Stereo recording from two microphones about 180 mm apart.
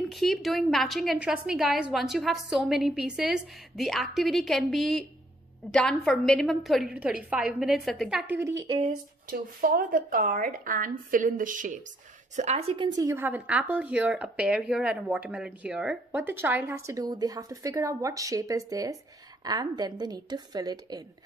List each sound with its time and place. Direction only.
0.1 s a woman's voice: centre (ahead or behind); by 8.6 s 15° right (ahead or behind)
8.6 s a woman's voice: 30° right (ahead or behind)
9.3 s a woman's voice: 50° right (ahead or behind)
12.4 s a woman's voice: 35° right (ahead or behind); by 21.0 s 20° right (ahead or behind)